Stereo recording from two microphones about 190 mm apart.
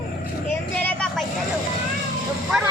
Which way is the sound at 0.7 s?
10° left (ahead or behind).